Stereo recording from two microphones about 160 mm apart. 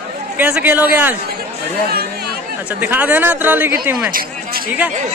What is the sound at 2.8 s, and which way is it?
Speech, 10° right (ahead or behind).